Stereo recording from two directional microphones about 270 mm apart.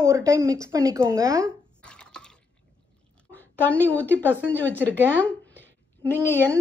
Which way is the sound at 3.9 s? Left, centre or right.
Centre.